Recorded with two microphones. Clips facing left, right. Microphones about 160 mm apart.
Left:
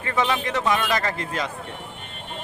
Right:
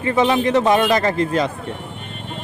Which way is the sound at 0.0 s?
25° right (ahead or behind).